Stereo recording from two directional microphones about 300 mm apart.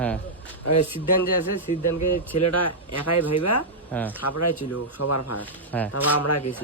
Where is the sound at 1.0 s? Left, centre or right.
Left.